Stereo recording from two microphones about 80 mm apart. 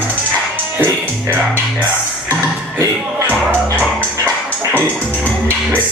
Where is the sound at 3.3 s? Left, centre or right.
Centre.